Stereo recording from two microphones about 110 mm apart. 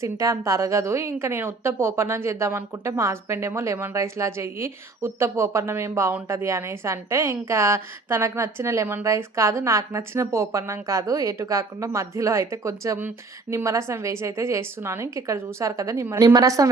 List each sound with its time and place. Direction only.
0.0 s a woman's voice: 30° right (ahead or behind)